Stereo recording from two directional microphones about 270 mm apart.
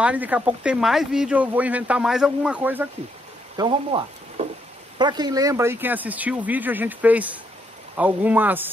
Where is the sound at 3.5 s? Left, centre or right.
Centre.